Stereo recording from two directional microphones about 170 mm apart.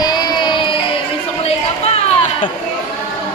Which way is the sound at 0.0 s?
25° left (ahead or behind).